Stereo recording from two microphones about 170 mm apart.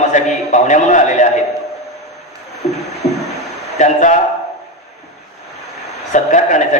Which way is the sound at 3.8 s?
45° left (ahead or behind).